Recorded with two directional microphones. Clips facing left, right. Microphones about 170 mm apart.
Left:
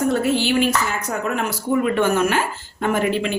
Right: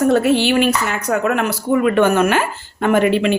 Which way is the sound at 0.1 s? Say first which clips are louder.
Right 5 dB; 75° right (ahead or behind).